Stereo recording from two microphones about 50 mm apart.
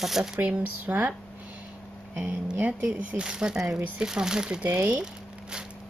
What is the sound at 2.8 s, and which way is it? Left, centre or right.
Speech, right.